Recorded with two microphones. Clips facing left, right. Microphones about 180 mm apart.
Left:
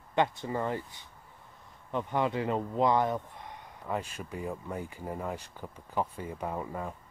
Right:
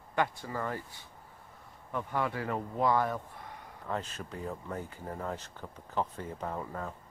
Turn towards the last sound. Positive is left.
turn(degrees=10)  # may be behind; listen again after turning